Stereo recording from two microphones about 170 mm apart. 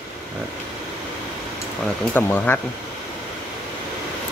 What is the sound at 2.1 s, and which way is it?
Speech, 10° left (ahead or behind).